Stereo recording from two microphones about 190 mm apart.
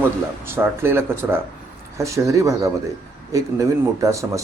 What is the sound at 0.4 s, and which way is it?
Speech, 10° right (ahead or behind).